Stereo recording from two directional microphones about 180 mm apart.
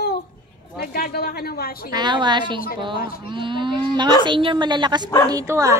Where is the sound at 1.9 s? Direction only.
25° right (ahead or behind).